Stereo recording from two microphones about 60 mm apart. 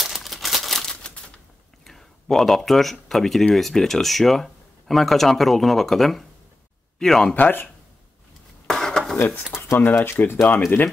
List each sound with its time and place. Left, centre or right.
0.0 s crumpling: centre
1.9 s speech: centre
7.3 s speech: left
8.6 s a sound: centre
9.6 s speech: left